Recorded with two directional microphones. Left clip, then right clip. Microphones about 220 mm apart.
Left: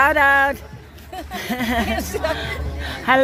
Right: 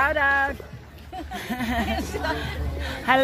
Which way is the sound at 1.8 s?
50° left (ahead or behind).